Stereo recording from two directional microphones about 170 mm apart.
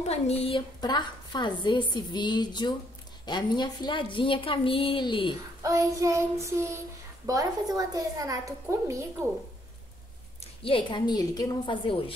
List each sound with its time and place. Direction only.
0.1 s a woman's voice: 35° left (ahead or behind)
5.6 s child singing: 20° right (ahead or behind)
7.2 s a woman's voice: 20° right (ahead or behind)
10.4 s a woman's voice: 30° left (ahead or behind)